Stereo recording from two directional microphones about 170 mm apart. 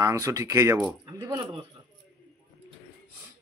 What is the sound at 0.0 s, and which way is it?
Speech, 20° right (ahead or behind).